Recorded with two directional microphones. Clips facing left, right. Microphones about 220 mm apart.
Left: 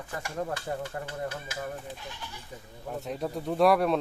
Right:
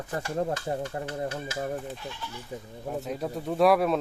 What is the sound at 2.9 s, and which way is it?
Speech, centre (ahead or behind).